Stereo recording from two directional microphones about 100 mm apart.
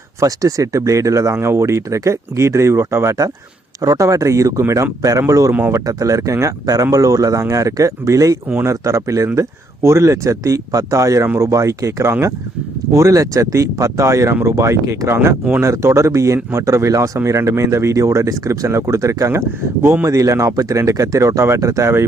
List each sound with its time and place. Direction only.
0.2 s speech: 35° right (ahead or behind)
5.5 s speech: 20° right (ahead or behind)
5.8 s speech: 35° right (ahead or behind)